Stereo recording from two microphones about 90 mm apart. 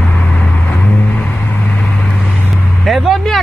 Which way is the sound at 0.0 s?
15° left (ahead or behind).